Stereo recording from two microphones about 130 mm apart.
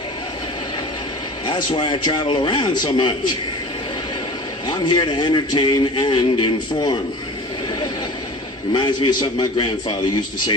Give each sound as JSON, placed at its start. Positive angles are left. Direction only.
{"t": 1.5, "sound": "a man's voice", "side_deg": 35}
{"t": 4.6, "sound": "a man's voice", "side_deg": 35}
{"t": 8.7, "sound": "a man's voice", "side_deg": 35}